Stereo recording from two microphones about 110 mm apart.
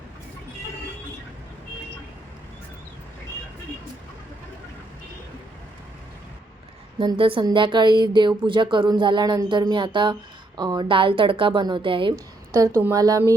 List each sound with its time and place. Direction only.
7.0 s speech: 50° right (ahead or behind)
12.1 s a woman's voice: 30° right (ahead or behind)